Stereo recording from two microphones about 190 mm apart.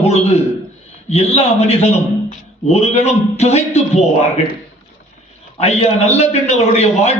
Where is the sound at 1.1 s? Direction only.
35° left (ahead or behind).